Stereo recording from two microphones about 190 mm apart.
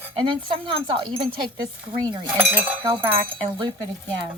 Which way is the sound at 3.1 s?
25° right (ahead or behind).